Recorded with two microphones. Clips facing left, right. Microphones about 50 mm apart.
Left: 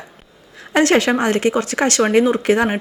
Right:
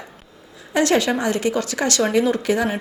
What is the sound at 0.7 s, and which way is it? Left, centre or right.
A woman's voice, left.